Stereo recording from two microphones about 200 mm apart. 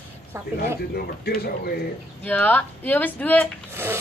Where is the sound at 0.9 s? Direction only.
50° left (ahead or behind).